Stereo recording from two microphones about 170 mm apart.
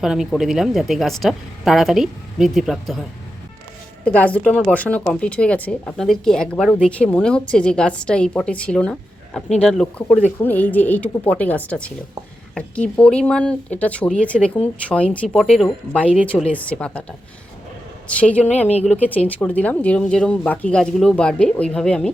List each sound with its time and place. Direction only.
0.0 s a woman's voice: centre (ahead or behind)
4.0 s a woman's voice: 10° left (ahead or behind)
18.1 s speech: 10° left (ahead or behind)
18.7 s speech: 40° left (ahead or behind)
18.9 s a woman's voice: 10° left (ahead or behind)